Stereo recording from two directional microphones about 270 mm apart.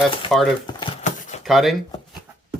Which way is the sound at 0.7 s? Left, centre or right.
Left.